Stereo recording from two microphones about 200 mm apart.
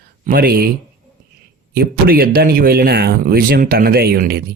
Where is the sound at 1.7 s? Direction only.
50° right (ahead or behind).